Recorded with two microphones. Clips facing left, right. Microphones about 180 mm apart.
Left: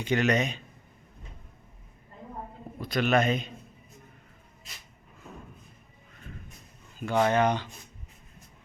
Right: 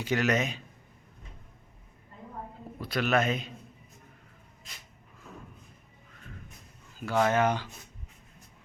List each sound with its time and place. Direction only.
0.0 s speech: 5° right (ahead or behind)
2.8 s speech: 5° right (ahead or behind)
7.0 s speech: 5° right (ahead or behind)